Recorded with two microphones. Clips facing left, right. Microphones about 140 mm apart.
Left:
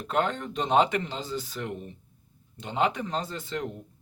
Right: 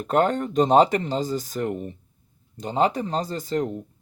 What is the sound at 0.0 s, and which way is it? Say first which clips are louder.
Speech: right 7 dB; 45° right (ahead or behind).